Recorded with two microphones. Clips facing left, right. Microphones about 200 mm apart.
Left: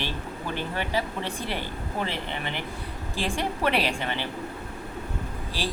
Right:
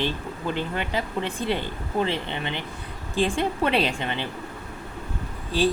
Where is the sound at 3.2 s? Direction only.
20° right (ahead or behind).